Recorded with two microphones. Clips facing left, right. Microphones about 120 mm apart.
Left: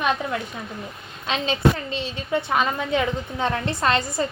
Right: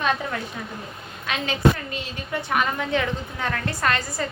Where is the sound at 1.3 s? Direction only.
25° left (ahead or behind).